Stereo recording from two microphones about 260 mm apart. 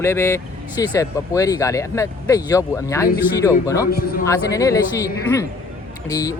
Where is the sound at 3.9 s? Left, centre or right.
Left.